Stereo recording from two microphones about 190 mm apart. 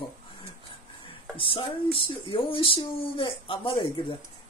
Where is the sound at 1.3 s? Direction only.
30° left (ahead or behind).